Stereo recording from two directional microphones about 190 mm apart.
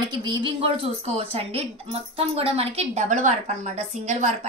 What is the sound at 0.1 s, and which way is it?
A woman's voice, 25° right (ahead or behind).